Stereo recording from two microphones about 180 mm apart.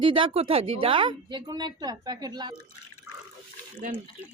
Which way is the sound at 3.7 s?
50° right (ahead or behind).